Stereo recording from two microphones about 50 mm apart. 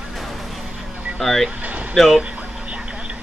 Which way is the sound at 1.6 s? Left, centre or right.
Right.